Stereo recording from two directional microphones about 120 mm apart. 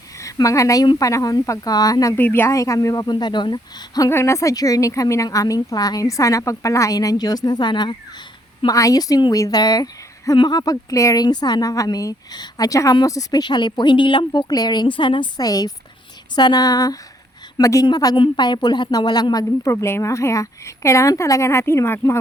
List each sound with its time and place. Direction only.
0.2 s a woman's voice: 25° left (ahead or behind)
2.1 s a woman's voice: 15° left (ahead or behind); by 4.1 s 35° left (ahead or behind)
4.1 s a woman's voice: 25° left (ahead or behind); by 7.9 s 40° left (ahead or behind)
8.6 s a woman's voice: 30° left (ahead or behind)
19.7 s a woman's voice: 20° left (ahead or behind)